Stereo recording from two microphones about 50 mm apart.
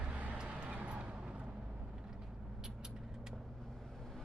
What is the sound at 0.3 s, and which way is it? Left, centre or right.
Vehicle, right.